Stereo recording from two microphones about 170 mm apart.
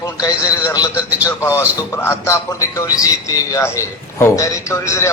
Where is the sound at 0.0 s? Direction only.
20° left (ahead or behind).